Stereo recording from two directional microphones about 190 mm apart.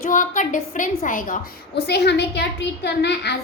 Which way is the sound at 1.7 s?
60° left (ahead or behind).